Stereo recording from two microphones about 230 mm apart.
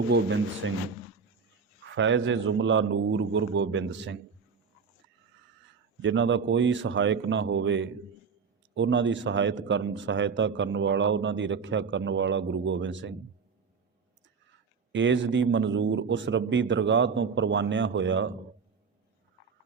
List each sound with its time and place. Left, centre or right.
0.1 s speech: right
2.0 s speech: right
6.0 s speech: right
14.9 s speech: right